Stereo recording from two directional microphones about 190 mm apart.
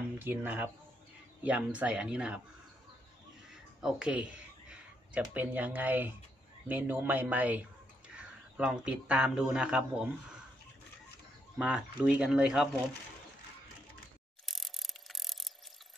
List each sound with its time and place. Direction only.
0.2 s speech: 10° right (ahead or behind)
3.8 s speech: 5° right (ahead or behind)
11.5 s speech: 5° right (ahead or behind)
14.4 s mechanisms: centre (ahead or behind)